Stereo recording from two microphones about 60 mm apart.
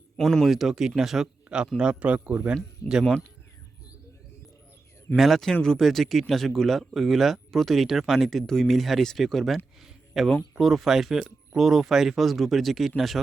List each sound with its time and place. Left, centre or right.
0.2 s a man's voice: centre; by 2.6 s right
2.8 s speech: left
5.1 s speech: centre
9.8 s a sound: centre
10.6 s speech: centre